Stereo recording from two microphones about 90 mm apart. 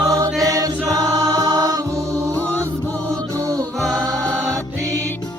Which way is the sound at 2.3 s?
15° left (ahead or behind).